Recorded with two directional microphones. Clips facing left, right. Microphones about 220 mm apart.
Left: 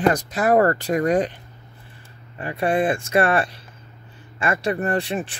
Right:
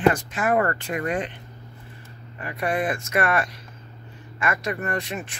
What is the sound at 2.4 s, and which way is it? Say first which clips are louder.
Speech: left 5 dB; 30° left (ahead or behind).